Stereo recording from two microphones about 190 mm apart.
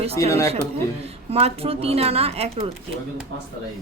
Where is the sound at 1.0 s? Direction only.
30° right (ahead or behind).